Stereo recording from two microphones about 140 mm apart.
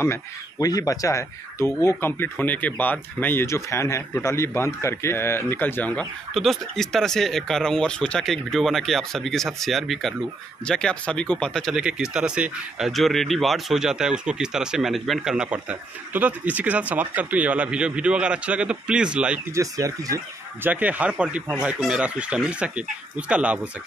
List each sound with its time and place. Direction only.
0.0 s speech: 20° left (ahead or behind)
6.3 s speech: centre (ahead or behind)
19.5 s speech: 25° right (ahead or behind)
20.6 s speech: 10° right (ahead or behind)